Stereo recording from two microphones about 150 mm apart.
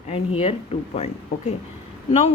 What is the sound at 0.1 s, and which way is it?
Speech, 40° left (ahead or behind).